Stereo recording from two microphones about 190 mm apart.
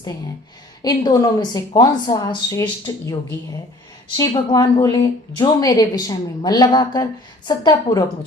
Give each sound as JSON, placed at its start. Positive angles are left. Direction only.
{"t": 0.8, "sound": "a woman's voice", "side_deg": 20}
{"t": 4.2, "sound": "a woman's voice", "side_deg": 20}